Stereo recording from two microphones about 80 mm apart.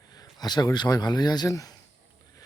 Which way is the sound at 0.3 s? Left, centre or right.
Left.